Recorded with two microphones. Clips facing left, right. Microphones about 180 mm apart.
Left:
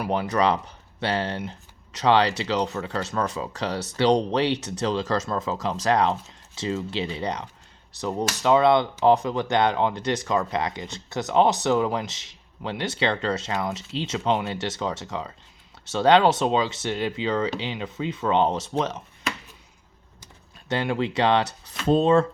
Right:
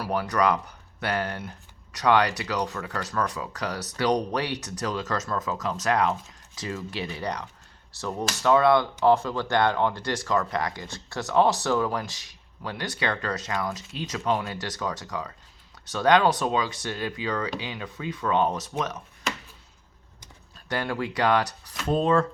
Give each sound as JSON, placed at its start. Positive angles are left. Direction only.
{"t": 0.0, "sound": "speech", "side_deg": 25}
{"t": 20.7, "sound": "speech", "side_deg": 25}